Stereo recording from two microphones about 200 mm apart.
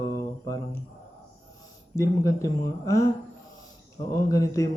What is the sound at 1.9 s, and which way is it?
Speech, 15° left (ahead or behind).